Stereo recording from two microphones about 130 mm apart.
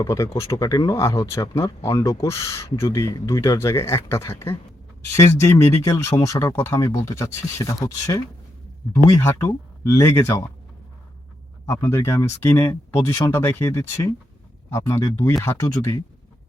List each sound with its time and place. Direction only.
0.0 s speech: 20° left (ahead or behind)
9.2 s speech: 25° left (ahead or behind)
11.6 s speech: 20° left (ahead or behind)